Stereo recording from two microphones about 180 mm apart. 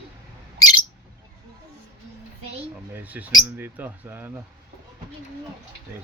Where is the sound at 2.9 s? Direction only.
10° right (ahead or behind).